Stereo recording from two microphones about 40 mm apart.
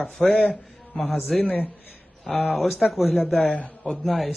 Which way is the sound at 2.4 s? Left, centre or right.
Centre.